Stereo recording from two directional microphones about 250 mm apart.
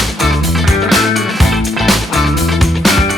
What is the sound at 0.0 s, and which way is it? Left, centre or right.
Music, centre.